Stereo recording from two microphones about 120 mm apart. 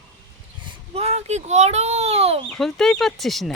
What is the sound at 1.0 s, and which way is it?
A child's voice, 60° right (ahead or behind).